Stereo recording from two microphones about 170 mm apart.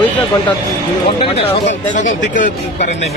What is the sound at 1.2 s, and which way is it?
Speech, 35° left (ahead or behind).